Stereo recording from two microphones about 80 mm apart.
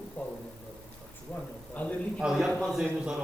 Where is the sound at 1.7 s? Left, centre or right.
Centre.